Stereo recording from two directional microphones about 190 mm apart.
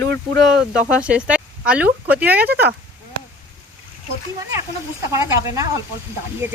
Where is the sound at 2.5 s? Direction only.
60° right (ahead or behind).